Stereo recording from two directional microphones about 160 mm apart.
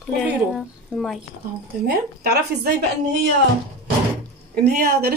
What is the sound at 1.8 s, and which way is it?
Speech, 80° right.